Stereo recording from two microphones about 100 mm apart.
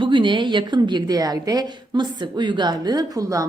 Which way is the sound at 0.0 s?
55° right (ahead or behind).